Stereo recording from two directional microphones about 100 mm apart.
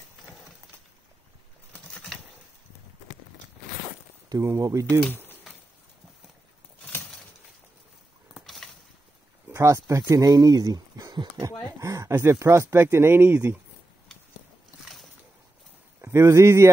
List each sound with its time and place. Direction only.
0.2 s horse: centre (ahead or behind)
4.3 s speech: 35° right (ahead or behind)
8.6 s a sound: centre (ahead or behind)
9.5 s speech: 30° right (ahead or behind)
16.0 s speech: 30° right (ahead or behind)